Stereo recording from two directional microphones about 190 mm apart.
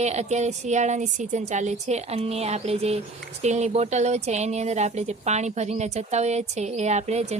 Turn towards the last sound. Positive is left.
turn(degrees=-35)  # may be behind; listen again after turning